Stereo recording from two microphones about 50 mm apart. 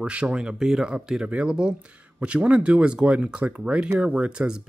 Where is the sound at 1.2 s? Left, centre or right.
Right.